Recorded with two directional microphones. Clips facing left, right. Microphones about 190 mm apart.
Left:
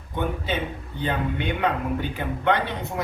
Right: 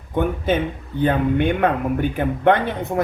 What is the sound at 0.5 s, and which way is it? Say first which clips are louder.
Speech: right 7 dB; 50° right (ahead or behind).